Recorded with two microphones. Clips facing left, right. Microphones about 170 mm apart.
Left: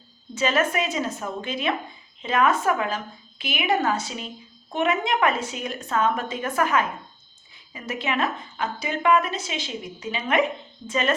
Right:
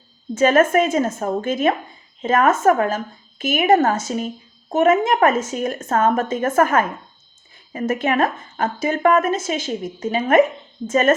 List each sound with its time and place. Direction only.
0.3 s a woman's voice: 50° right (ahead or behind)